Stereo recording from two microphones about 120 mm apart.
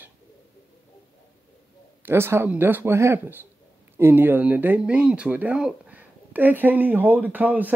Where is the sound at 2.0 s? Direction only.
20° right (ahead or behind).